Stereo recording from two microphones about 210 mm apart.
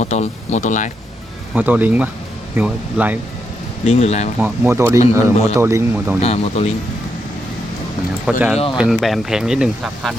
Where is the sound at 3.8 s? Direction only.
30° left (ahead or behind).